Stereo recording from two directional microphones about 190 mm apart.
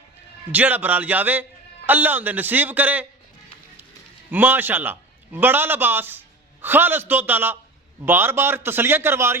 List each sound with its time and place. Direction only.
0.5 s a man's voice: 10° right (ahead or behind)
4.3 s a man's voice: 10° right (ahead or behind)